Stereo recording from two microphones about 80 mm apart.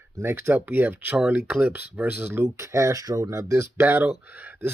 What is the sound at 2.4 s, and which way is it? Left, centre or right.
Speech, right.